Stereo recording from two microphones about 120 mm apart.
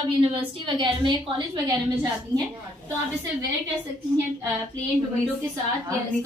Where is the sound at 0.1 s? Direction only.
45° right (ahead or behind).